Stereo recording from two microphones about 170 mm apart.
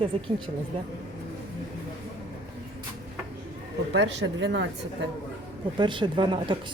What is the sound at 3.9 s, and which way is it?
Speech, 90° right.